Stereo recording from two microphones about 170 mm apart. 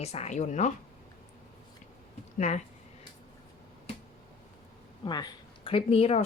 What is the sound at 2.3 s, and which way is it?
Speech, 45° left (ahead or behind).